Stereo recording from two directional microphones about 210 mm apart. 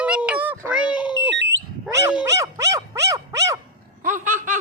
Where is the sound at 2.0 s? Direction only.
10° right (ahead or behind).